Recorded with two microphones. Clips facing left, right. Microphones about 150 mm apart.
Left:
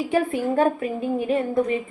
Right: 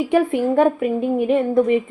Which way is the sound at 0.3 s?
25° right (ahead or behind).